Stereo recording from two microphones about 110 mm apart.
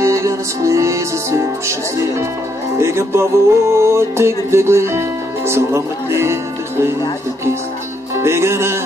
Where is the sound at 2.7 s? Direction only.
25° right (ahead or behind).